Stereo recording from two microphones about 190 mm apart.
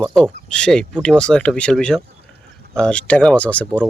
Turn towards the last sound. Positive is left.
turn(degrees=5)  # may be behind; listen again after turning